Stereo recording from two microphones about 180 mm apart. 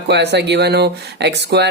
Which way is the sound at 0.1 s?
70° right (ahead or behind).